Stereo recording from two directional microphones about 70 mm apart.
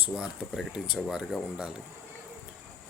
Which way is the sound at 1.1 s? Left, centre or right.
Centre.